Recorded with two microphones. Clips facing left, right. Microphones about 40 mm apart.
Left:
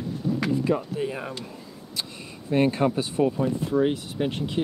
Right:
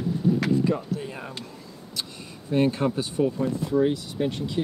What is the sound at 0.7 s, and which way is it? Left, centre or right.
Speech, centre.